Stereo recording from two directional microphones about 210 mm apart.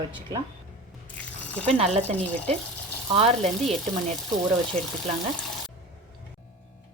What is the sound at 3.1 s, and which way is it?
Frying, 30° right (ahead or behind).